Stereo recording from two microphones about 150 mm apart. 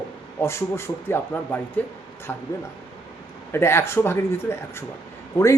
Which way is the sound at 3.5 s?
15° left (ahead or behind).